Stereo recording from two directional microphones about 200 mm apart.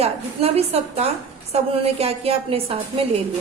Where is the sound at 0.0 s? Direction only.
30° right (ahead or behind).